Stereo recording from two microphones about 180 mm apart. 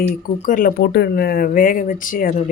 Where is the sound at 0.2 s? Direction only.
50° left (ahead or behind).